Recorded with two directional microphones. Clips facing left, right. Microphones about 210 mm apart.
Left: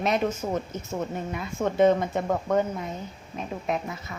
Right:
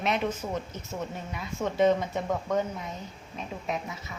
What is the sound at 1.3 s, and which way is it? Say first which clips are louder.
Speech: left 2 dB; 50° left (ahead or behind).